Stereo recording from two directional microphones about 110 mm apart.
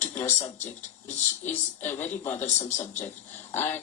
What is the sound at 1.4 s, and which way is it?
Speech, 20° left (ahead or behind).